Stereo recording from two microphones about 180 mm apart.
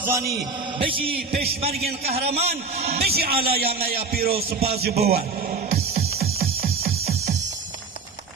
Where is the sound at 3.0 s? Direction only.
60° right (ahead or behind).